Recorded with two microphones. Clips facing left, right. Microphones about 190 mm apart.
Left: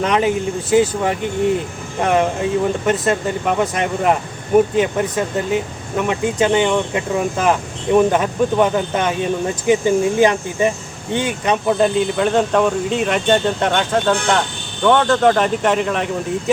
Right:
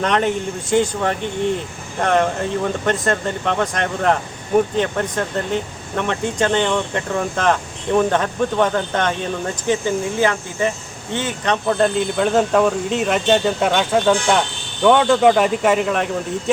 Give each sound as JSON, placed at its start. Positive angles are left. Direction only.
{"t": 0.0, "sound": "speech", "side_deg": 5}